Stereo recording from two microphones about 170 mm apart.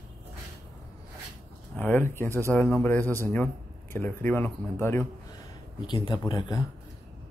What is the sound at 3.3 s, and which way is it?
Speech, 10° left (ahead or behind).